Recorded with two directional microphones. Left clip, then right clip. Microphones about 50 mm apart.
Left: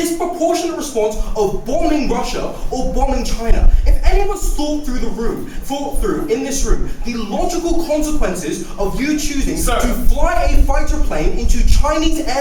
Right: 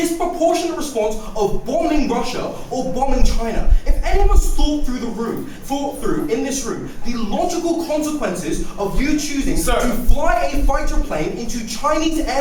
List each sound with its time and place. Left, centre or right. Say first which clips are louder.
0.0 s speech: even; centre